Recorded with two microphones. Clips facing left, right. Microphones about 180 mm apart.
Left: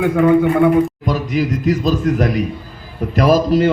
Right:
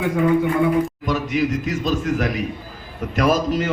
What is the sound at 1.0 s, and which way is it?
A man's voice, 35° left (ahead or behind).